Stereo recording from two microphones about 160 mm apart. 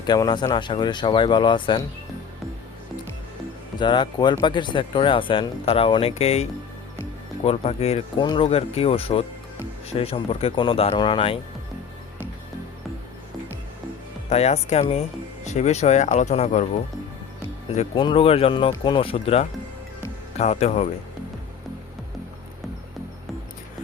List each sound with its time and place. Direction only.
0.0 s speech: 25° left (ahead or behind)
3.8 s speech: 30° left (ahead or behind)
8.2 s speech: 30° left (ahead or behind)
8.4 s speech: 40° left (ahead or behind)
14.3 s speech: 40° left (ahead or behind)
17.7 s speech: 35° left (ahead or behind)